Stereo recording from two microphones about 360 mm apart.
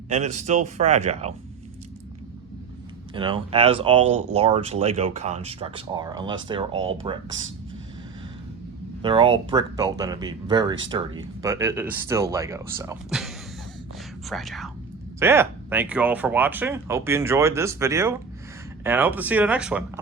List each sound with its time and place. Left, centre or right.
0.3 s speech: centre
3.2 s speech: centre
6.8 s speech: right
9.0 s speech: centre